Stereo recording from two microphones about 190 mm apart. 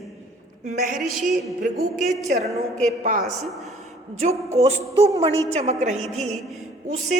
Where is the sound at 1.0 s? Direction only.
Centre (ahead or behind).